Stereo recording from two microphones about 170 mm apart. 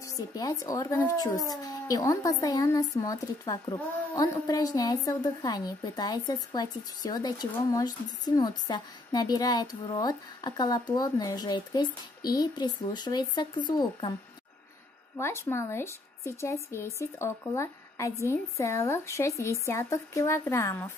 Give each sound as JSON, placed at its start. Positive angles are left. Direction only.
{"t": 0.0, "sound": "a child's voice", "side_deg": 20}
{"t": 15.1, "sound": "a woman's voice", "side_deg": 15}